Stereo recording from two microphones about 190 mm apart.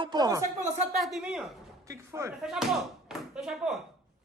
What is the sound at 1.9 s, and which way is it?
Speech, 15° right (ahead or behind).